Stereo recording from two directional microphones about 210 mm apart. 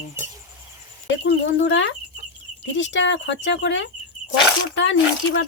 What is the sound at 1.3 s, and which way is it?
Speech, 60° left (ahead or behind).